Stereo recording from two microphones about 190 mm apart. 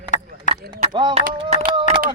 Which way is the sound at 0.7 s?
25° right (ahead or behind).